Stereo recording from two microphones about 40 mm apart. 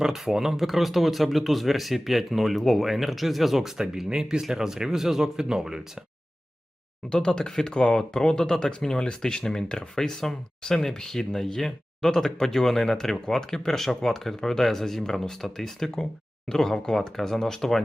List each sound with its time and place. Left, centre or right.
0.0 s speech: centre
7.1 s speech: centre